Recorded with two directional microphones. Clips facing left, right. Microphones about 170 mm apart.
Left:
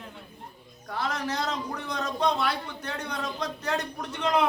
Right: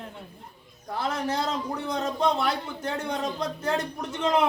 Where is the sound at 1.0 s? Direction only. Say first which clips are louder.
Right 2 dB; 30° right (ahead or behind).